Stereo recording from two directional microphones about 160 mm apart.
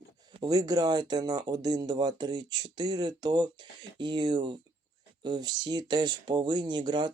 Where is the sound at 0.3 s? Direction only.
25° right (ahead or behind).